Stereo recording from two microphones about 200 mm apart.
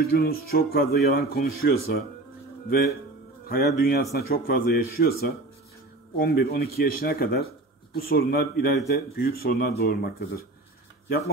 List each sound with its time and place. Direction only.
0.0 s speech: 50° left (ahead or behind)
3.4 s speech: 50° left (ahead or behind)